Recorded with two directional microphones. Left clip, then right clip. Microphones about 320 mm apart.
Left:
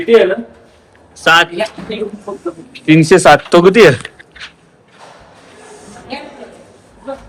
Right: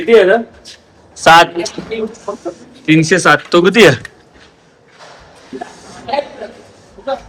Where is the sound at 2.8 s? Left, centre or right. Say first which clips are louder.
Left 3 dB; centre.